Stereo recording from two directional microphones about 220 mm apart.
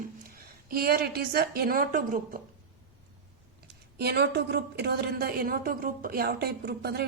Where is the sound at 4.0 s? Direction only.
45° right (ahead or behind).